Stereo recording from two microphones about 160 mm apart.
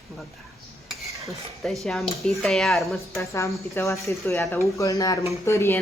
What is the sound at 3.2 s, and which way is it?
Speech, 20° left (ahead or behind).